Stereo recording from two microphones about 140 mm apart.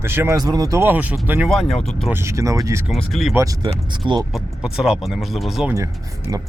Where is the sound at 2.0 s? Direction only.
20° right (ahead or behind).